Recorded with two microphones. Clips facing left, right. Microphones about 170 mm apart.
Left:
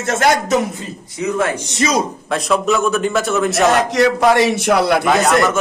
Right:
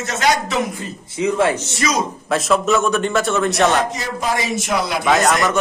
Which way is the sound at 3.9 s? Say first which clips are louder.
Left 10 dB; 70° left (ahead or behind).